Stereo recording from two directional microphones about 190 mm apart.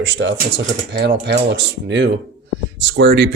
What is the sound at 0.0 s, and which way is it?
Speech, 75° right (ahead or behind).